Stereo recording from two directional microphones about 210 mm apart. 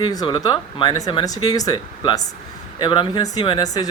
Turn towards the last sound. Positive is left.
turn(degrees=15)  # may be behind; listen again after turning